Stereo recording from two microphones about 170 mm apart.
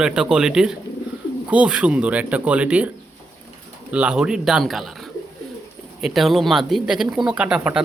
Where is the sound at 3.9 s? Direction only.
5° right (ahead or behind).